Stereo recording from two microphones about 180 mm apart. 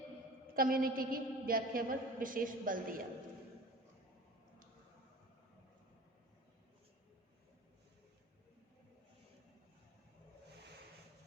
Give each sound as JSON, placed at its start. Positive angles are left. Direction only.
{"t": 0.5, "sound": "a woman's voice", "side_deg": -55}